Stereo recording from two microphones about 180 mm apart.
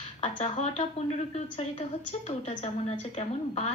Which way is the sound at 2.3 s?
35° left (ahead or behind).